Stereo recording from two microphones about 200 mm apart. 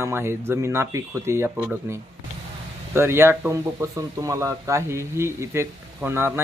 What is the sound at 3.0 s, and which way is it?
Speech, 10° right (ahead or behind).